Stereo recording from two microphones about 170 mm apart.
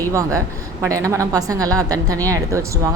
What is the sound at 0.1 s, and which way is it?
A woman's voice, 20° right (ahead or behind).